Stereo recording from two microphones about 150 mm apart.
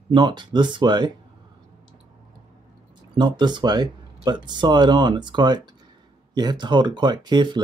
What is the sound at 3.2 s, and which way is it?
Speech, 30° right (ahead or behind).